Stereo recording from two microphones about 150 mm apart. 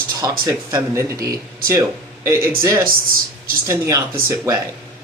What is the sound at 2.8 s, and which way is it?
Speech, 75° right (ahead or behind).